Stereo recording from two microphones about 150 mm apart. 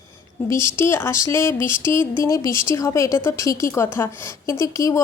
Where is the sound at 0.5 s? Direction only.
15° left (ahead or behind).